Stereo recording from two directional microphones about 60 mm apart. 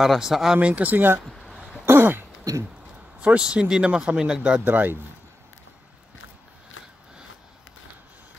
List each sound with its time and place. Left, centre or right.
0.0 s speech: centre
0.6 s speech: right
1.3 s a sound: centre
1.9 s throat clearing: right
2.5 s a sound: right
3.2 s speech: centre
4.6 s speech: right